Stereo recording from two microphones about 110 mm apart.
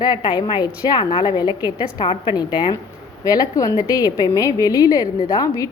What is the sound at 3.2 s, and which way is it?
A woman's voice, 30° left (ahead or behind).